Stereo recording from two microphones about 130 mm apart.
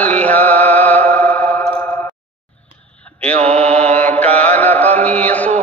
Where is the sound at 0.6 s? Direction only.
60° right (ahead or behind).